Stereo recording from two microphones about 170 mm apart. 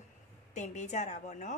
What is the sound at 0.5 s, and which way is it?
A woman's voice, 45° left (ahead or behind).